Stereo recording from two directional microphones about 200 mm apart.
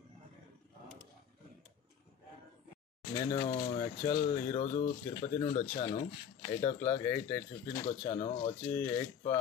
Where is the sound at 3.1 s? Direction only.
25° left (ahead or behind).